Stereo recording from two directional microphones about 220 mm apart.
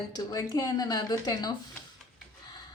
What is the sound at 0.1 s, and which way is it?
Speech, 15° left (ahead or behind).